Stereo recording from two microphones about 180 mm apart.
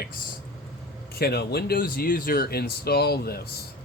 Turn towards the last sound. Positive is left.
turn(degrees=60)  # may be behind; listen again after turning